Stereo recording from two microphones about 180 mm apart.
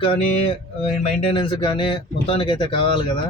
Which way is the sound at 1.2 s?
30° left (ahead or behind).